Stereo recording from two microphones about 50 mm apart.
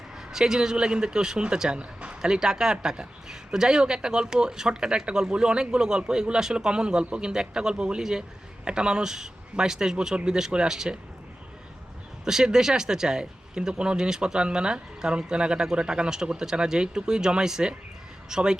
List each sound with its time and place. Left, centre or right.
0.2 s speech: centre
12.2 s speech: centre